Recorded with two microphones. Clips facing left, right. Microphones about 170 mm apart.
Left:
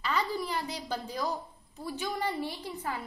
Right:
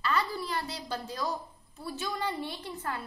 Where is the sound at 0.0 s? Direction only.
15° left (ahead or behind).